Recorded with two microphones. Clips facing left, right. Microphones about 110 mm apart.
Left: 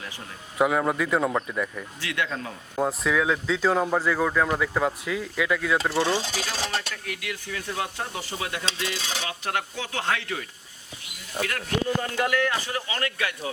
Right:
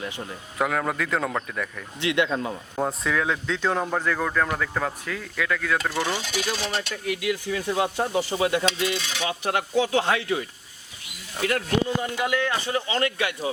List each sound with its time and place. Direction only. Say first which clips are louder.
0.6 s speech: left 3 dB; 5° left (ahead or behind)
2.0 s speech: right 7 dB; 20° right (ahead or behind)
2.7 s speech: left 2 dB; centre (ahead or behind); by 5.8 s 15° left (ahead or behind)
5.9 s speech: left 2 dB; 30° left (ahead or behind)
6.9 s speech: right 8 dB; 20° right (ahead or behind)
8.6 s speech: right 6 dB; 30° left (ahead or behind)
9.4 s speech: right 9 dB; 15° right (ahead or behind)